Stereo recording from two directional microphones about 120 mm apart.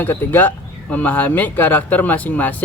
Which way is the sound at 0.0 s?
15° left (ahead or behind).